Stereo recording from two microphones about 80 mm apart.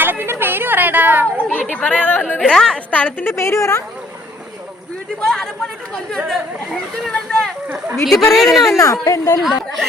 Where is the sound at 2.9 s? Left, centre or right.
Left.